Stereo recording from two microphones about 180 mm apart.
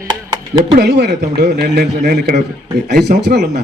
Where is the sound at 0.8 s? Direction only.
60° right (ahead or behind).